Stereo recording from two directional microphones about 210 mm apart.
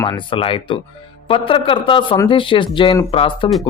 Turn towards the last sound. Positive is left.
turn(degrees=25)  # may be behind; listen again after turning